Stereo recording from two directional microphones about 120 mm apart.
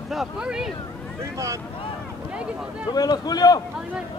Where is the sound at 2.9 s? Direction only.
35° left (ahead or behind).